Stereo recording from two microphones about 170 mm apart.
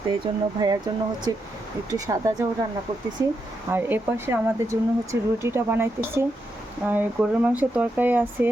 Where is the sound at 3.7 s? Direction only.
10° right (ahead or behind).